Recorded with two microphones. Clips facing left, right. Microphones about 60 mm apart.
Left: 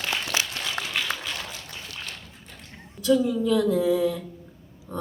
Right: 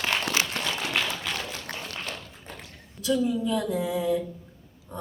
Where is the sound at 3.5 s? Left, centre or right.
Centre.